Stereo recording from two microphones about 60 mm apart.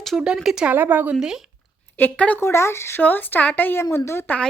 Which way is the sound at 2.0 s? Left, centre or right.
Left.